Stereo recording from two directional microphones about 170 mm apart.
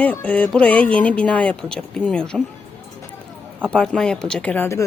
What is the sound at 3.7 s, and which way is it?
Speech, 5° left (ahead or behind).